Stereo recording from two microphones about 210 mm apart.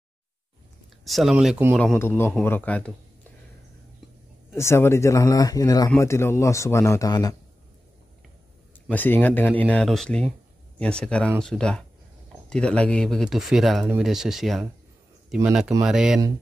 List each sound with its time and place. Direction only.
1.0 s speech: centre (ahead or behind)
1.8 s a man's voice: 10° left (ahead or behind)
4.6 s a man's voice: 10° left (ahead or behind)
8.9 s a man's voice: 10° left (ahead or behind)